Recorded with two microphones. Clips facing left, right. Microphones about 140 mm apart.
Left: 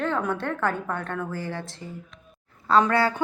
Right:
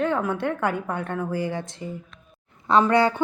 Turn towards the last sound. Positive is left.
turn(degrees=-15)  # may be behind; listen again after turning